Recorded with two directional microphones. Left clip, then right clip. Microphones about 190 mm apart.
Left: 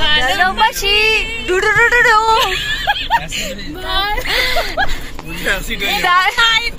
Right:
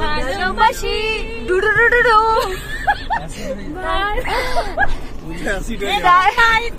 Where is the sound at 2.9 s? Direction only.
5° left (ahead or behind).